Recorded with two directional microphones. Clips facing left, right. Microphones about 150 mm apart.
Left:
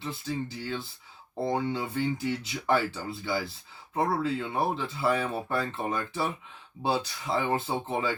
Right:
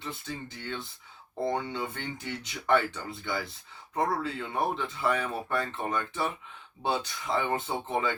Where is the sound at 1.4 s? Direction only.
30° left (ahead or behind).